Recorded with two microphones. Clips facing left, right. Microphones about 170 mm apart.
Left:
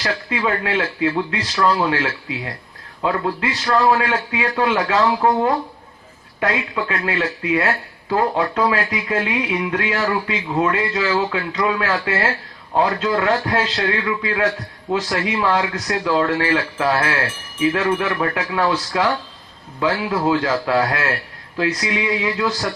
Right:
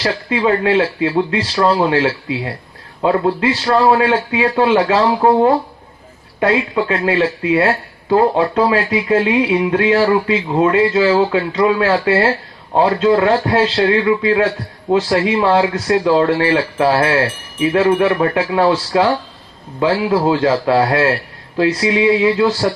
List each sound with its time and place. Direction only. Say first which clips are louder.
0.0 s speech: right 6 dB; 30° right (ahead or behind)